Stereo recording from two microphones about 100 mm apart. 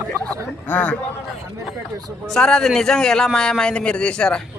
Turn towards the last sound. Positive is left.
turn(degrees=10)  # may be behind; listen again after turning